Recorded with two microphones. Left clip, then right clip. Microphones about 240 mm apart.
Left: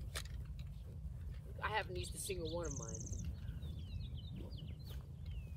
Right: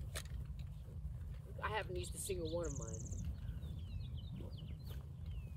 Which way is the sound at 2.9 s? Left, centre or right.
Centre.